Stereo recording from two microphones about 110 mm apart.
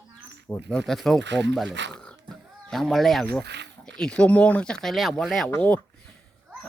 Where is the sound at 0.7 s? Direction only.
5° left (ahead or behind).